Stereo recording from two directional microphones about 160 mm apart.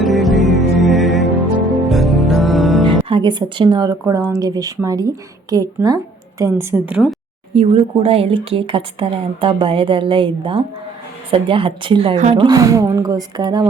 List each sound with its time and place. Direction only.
0.0 s music: centre (ahead or behind)
2.8 s speech: 35° right (ahead or behind); by 7.2 s 5° right (ahead or behind)
7.5 s speech: 35° right (ahead or behind)
12.1 s speech: 50° right (ahead or behind)
12.4 s speech: 20° right (ahead or behind)